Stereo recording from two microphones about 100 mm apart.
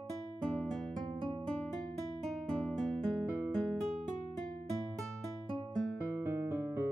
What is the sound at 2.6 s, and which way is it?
Music, 5° left (ahead or behind).